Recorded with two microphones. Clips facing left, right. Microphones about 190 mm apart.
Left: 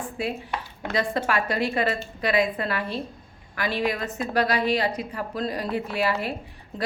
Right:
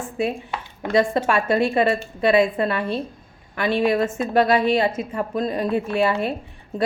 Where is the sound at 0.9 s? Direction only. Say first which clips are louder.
Right 6 dB; 25° right (ahead or behind).